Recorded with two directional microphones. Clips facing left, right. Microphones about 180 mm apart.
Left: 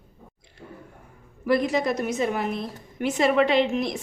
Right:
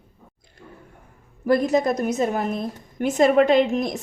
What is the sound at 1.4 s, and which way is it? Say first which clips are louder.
A woman's voice: right 3 dB; 45° right (ahead or behind).